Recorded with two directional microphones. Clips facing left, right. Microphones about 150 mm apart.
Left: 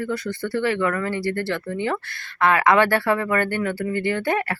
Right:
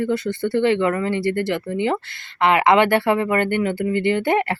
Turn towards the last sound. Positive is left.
turn(degrees=-20)  # may be behind; listen again after turning